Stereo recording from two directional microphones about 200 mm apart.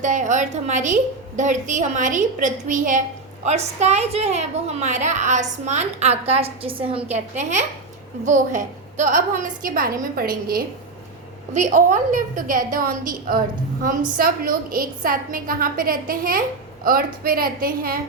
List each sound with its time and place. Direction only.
0.0 s a woman's voice: 40° right (ahead or behind)